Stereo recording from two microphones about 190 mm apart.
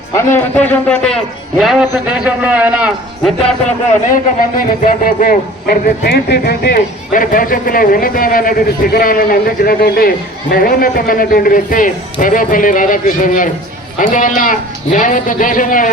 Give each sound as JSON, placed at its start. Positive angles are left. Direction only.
{"t": 0.1, "sound": "a man's voice", "side_deg": 15}
{"t": 4.5, "sound": "speech", "side_deg": 45}